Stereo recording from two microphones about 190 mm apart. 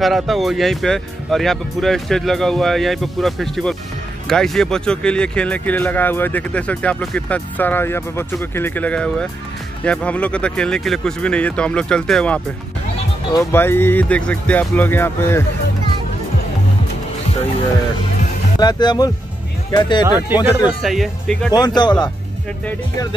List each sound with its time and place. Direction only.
0.0 s speech: centre (ahead or behind)
18.6 s speech: 20° left (ahead or behind)
20.8 s speech: centre (ahead or behind)
21.5 s speech: 20° left (ahead or behind)